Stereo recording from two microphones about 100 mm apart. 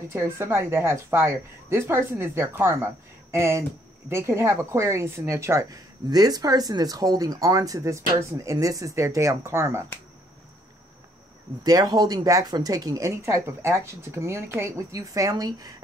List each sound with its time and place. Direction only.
0.1 s a woman's voice: 25° right (ahead or behind)
11.6 s a woman's voice: 40° right (ahead or behind)